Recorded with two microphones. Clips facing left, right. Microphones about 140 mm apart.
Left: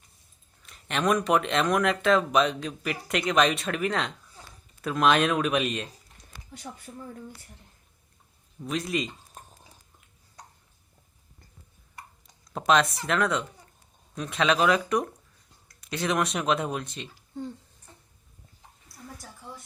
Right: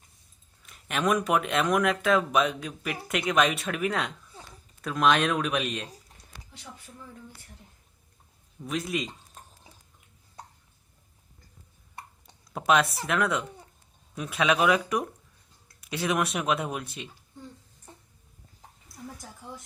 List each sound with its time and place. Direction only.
0.6 s speech: 5° right (ahead or behind)
6.5 s speech: 45° left (ahead or behind)
8.6 s speech: centre (ahead or behind)
12.5 s speech: 5° right (ahead or behind)